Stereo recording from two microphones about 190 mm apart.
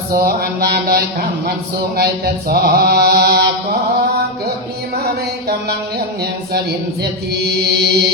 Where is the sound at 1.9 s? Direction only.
55° right (ahead or behind).